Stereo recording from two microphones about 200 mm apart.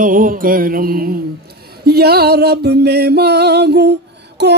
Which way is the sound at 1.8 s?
50° right (ahead or behind).